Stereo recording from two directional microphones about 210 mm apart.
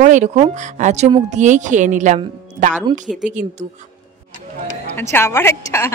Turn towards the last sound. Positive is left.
turn(degrees=10)  # may be behind; listen again after turning